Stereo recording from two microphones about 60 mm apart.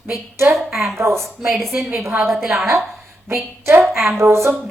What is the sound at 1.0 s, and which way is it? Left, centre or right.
Speech, right.